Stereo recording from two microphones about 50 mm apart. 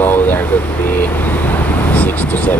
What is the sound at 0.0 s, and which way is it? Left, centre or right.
Vehicle, left.